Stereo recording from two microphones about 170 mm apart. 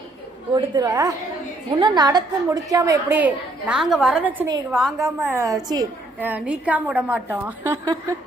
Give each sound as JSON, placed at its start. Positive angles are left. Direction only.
{"t": 0.5, "sound": "a woman's voice", "side_deg": -25}
{"t": 5.0, "sound": "a woman's voice", "side_deg": -15}
{"t": 6.1, "sound": "a woman's voice", "side_deg": -10}